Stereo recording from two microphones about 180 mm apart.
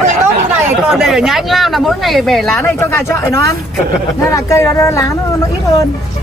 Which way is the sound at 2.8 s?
15° left (ahead or behind).